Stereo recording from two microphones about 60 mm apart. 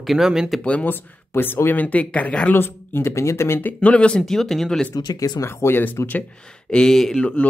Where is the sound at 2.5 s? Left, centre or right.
Left.